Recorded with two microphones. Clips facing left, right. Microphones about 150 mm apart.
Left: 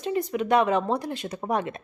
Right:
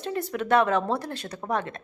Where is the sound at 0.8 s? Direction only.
15° left (ahead or behind).